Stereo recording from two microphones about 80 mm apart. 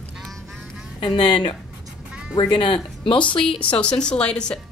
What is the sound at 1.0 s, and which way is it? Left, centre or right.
Speech, left.